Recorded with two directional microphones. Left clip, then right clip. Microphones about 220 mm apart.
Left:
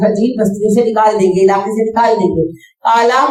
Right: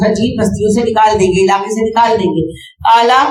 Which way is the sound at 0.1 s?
20° right (ahead or behind).